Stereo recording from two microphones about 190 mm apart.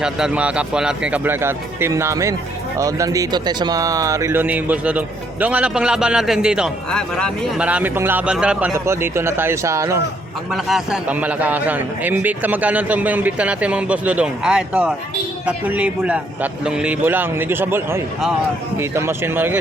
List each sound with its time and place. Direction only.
0.0 s speech: 5° right (ahead or behind)
7.6 s speech: 5° right (ahead or behind)
10.5 s speech: centre (ahead or behind)